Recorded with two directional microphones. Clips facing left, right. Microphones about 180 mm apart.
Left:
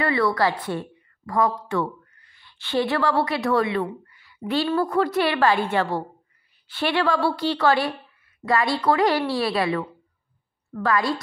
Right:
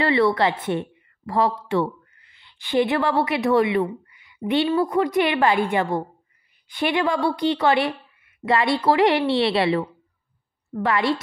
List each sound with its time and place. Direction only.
0.0 s a woman's voice: 25° right (ahead or behind)